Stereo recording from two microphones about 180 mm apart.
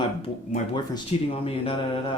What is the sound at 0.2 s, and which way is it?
Speech, 30° left (ahead or behind).